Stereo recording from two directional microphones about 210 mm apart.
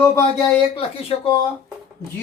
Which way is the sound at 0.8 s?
25° left (ahead or behind).